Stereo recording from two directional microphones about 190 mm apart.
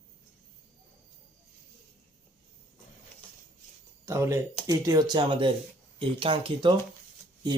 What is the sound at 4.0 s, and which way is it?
Speech, 15° right (ahead or behind).